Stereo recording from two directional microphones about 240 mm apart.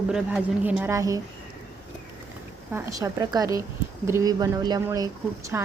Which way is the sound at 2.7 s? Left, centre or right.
Centre.